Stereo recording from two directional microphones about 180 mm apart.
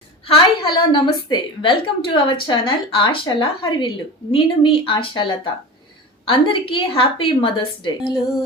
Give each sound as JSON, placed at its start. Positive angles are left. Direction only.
{"t": 0.3, "sound": "a woman's voice", "side_deg": 25}